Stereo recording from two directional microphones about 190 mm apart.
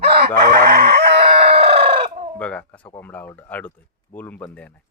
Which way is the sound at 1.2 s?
30° right (ahead or behind).